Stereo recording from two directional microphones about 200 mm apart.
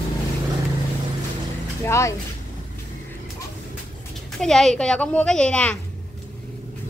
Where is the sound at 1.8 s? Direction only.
15° left (ahead or behind).